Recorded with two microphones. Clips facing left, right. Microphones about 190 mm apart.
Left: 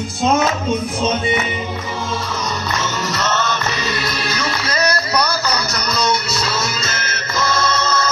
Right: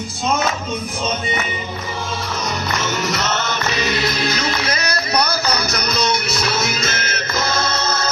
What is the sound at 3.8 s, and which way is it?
Music, 20° right (ahead or behind).